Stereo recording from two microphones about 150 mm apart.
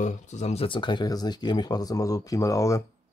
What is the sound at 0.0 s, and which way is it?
Speech, 50° left (ahead or behind).